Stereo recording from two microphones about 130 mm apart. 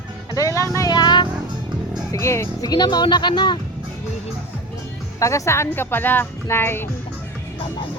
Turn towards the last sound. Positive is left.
turn(degrees=20)  # may be behind; listen again after turning